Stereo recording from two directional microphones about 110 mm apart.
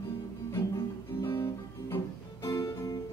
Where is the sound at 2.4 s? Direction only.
35° left (ahead or behind).